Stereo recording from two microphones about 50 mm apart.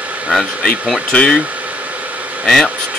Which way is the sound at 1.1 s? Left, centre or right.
Centre.